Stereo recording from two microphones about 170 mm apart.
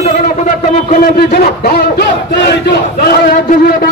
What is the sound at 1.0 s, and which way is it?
A man's voice, 60° left (ahead or behind).